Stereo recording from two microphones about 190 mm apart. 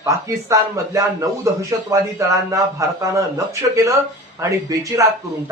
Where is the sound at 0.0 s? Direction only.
15° right (ahead or behind).